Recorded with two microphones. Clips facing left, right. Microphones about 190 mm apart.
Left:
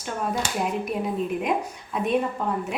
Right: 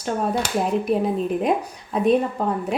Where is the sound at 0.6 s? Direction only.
35° right (ahead or behind).